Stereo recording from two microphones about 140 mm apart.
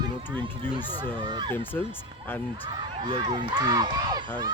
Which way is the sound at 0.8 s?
30° right (ahead or behind).